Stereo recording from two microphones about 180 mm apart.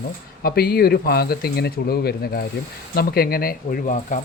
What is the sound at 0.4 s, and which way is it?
Speech, 60° left (ahead or behind).